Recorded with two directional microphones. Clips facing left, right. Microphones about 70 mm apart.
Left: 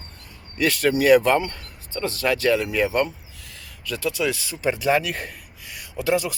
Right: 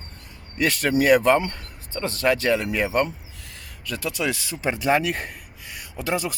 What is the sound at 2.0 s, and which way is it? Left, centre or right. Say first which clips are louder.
Speech: right 1 dB; right.